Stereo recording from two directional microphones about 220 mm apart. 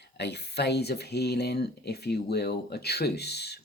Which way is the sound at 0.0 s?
50° left (ahead or behind).